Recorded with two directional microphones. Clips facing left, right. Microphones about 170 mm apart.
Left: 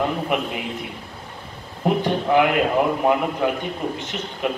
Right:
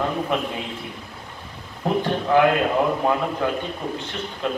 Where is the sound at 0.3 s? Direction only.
15° left (ahead or behind).